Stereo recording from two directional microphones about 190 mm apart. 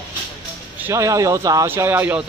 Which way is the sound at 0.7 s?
15° right (ahead or behind).